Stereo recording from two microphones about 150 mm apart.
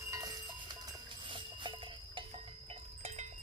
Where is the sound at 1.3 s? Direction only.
30° right (ahead or behind).